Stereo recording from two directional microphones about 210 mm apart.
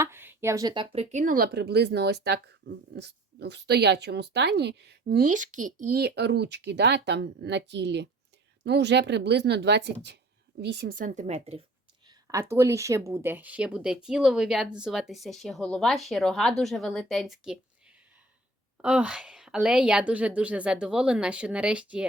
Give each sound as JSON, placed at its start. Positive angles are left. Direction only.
{"t": 0.0, "sound": "speech", "side_deg": -10}
{"t": 5.8, "sound": "a woman's voice", "side_deg": -50}
{"t": 12.0, "sound": "speech", "side_deg": -15}